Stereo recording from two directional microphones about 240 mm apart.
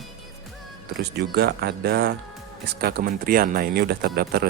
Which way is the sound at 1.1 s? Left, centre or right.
Right.